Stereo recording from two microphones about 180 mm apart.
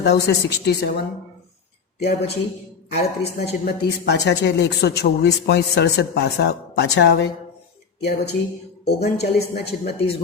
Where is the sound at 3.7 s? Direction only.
60° left (ahead or behind).